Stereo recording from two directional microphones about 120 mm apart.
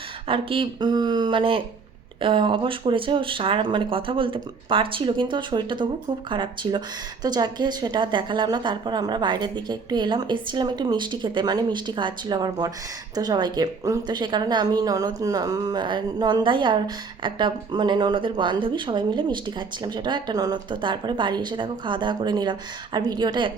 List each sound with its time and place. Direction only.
0.3 s a woman's voice: 50° right (ahead or behind)